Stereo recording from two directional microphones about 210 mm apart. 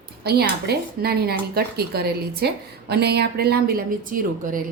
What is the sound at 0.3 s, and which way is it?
A woman's voice, 50° right (ahead or behind).